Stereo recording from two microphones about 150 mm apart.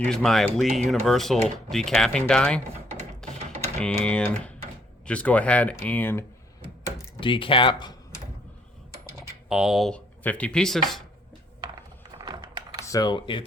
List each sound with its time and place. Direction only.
0.0 s speech: 5° left (ahead or behind)
3.2 s a sound: 5° left (ahead or behind)
3.8 s speech: 5° left (ahead or behind)
7.2 s speech: 35° left (ahead or behind)
9.5 s speech: 5° right (ahead or behind)
11.6 s a sound: 30° right (ahead or behind)
12.8 s speech: 25° left (ahead or behind)